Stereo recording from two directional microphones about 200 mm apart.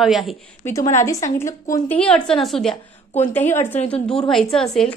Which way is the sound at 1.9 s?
5° left (ahead or behind).